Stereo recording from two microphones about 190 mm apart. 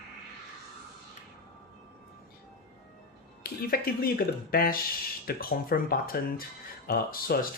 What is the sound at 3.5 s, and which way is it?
Speech, 55° left (ahead or behind).